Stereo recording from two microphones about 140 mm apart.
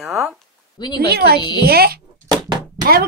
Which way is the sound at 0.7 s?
30° left (ahead or behind).